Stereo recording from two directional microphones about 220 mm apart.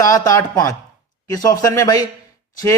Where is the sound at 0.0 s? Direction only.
15° left (ahead or behind).